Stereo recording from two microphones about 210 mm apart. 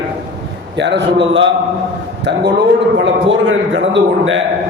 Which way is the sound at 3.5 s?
65° right (ahead or behind).